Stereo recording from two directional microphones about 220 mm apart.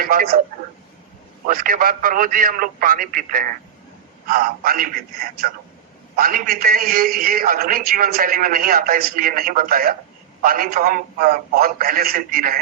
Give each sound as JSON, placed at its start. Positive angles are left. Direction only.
{"t": 0.0, "sound": "a man's voice", "side_deg": -40}
{"t": 1.5, "sound": "a man's voice", "side_deg": -40}